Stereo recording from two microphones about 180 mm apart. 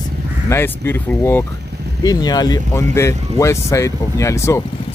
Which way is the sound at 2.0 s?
20° left (ahead or behind).